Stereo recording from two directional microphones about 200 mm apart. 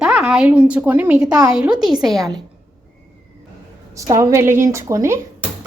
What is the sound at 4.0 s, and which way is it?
Speech, 15° right (ahead or behind).